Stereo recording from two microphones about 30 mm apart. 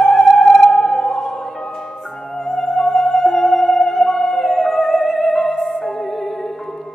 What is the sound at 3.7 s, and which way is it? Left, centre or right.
Theremin, centre.